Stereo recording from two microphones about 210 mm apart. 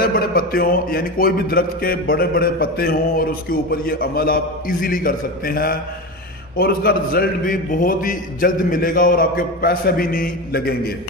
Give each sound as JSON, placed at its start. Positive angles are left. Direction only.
{"t": 0.0, "sound": "a man's voice", "side_deg": 40}